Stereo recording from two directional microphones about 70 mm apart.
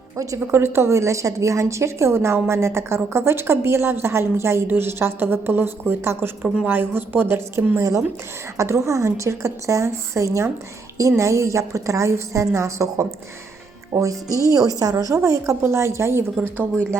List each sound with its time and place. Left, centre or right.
0.3 s a woman's voice: right